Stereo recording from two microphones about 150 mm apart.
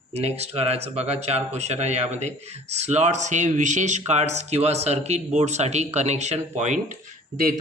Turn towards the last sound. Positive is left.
turn(degrees=-55)  # may be behind; listen again after turning